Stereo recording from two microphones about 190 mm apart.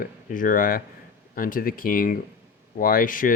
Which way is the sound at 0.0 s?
45° left (ahead or behind).